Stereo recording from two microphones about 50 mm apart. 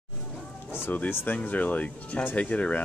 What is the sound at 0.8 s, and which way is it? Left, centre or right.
Speech, left.